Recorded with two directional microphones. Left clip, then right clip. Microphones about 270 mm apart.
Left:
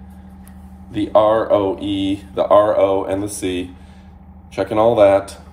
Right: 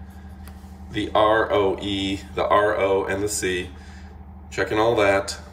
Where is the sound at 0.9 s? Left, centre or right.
Centre.